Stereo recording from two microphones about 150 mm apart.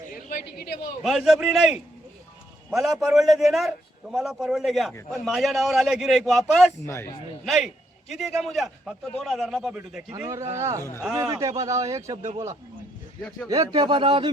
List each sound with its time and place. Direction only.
0.3 s a woman's voice: 70° left (ahead or behind)
1.0 s a man's voice: 5° right (ahead or behind)
6.8 s a man's voice: 15° left (ahead or behind)
7.4 s a man's voice: centre (ahead or behind)
10.1 s a man's voice: 20° right (ahead or behind)
13.7 s speech: 35° right (ahead or behind)